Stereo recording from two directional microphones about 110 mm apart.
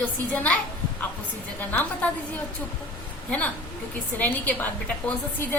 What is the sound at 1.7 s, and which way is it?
Speech, 15° left (ahead or behind).